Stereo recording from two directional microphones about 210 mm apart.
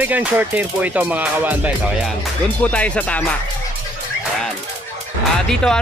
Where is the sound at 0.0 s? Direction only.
10° right (ahead or behind).